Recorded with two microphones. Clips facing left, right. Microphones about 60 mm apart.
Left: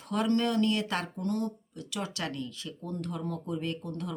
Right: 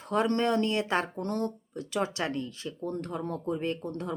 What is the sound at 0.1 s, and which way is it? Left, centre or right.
Speech, right.